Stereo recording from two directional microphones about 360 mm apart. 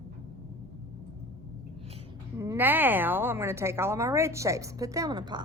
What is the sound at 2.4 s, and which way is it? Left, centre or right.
Speech, centre.